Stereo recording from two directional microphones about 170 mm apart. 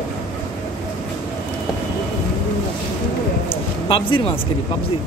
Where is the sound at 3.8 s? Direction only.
30° left (ahead or behind).